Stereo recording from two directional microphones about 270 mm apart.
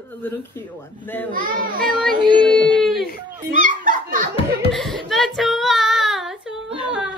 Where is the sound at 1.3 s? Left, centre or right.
Right.